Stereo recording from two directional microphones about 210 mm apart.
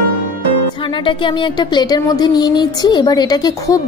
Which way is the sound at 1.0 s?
25° left (ahead or behind).